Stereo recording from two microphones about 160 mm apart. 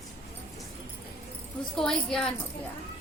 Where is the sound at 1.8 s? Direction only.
5° left (ahead or behind).